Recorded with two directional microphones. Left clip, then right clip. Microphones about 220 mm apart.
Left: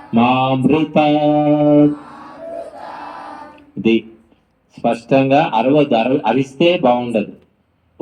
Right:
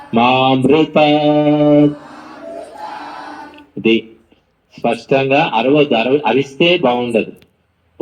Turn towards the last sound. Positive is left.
turn(degrees=15)  # may be behind; listen again after turning